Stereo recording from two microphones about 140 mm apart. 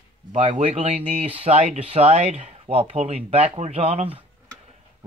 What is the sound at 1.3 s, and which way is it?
Speech, 50° right (ahead or behind).